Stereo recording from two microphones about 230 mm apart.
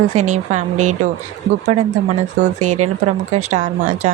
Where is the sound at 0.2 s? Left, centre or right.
Right.